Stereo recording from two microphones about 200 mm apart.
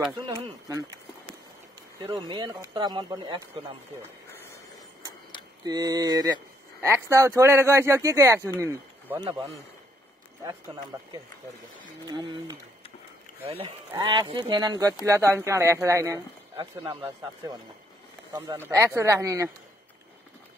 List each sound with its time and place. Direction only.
0.3 s speech: 20° right (ahead or behind)
2.0 s speech: 20° right (ahead or behind)
4.0 s a sound: 15° left (ahead or behind)
5.7 s speech: 20° right (ahead or behind)
12.1 s speech: 20° right (ahead or behind)
13.9 s speech: 20° right (ahead or behind)
16.5 s speech: 25° right (ahead or behind)